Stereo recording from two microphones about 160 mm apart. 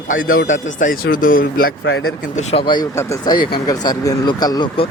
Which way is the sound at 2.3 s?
35° left (ahead or behind).